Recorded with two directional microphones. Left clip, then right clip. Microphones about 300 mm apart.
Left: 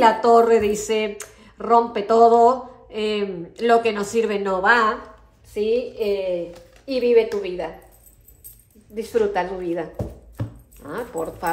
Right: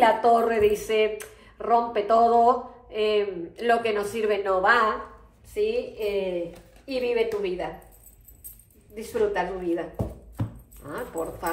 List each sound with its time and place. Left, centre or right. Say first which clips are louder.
0.0 s speech: left 5 dB; left
8.9 s speech: left 4 dB; left